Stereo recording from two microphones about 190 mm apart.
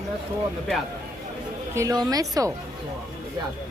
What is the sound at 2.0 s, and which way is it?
Speech, 20° right (ahead or behind).